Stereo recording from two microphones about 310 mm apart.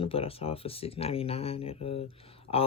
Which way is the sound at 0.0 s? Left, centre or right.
Centre.